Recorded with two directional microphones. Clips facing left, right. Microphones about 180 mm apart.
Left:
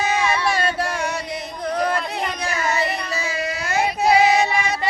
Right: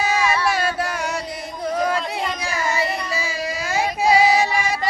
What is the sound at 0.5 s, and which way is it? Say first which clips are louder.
Music: even; 5° right (ahead or behind).